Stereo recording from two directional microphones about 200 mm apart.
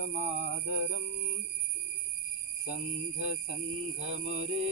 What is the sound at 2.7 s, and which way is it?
Mantra, 35° right (ahead or behind).